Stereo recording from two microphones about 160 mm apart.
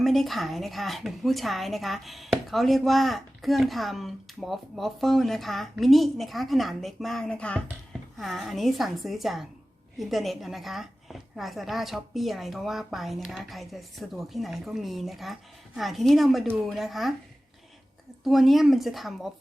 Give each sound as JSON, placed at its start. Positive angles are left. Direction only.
{"t": 0.0, "sound": "speech", "side_deg": 0}
{"t": 18.2, "sound": "speech", "side_deg": 0}